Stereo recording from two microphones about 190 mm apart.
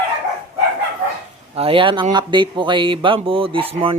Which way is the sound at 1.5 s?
30° right (ahead or behind).